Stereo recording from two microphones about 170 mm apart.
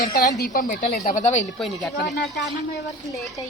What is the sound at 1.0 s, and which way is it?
Speech, 45° left (ahead or behind).